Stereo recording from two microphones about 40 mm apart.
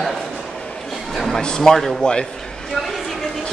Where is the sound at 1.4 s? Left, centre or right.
Centre.